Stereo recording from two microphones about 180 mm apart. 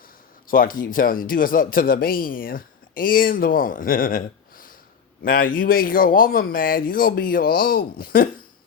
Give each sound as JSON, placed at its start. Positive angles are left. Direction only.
{"t": 0.4, "sound": "speech", "side_deg": 50}